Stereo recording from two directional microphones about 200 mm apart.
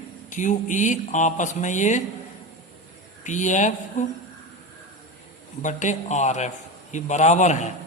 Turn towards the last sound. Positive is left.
turn(degrees=35)  # may be behind; listen again after turning